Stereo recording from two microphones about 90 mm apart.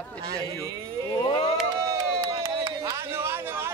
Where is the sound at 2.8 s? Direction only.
30° right (ahead or behind).